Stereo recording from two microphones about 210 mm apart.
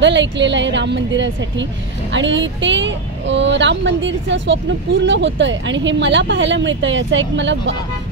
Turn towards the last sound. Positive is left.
turn(degrees=-60)  # may be behind; listen again after turning